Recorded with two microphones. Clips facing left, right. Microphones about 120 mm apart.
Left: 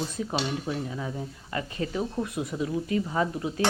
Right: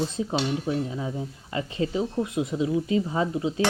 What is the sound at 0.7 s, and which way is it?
Speech, 20° right (ahead or behind).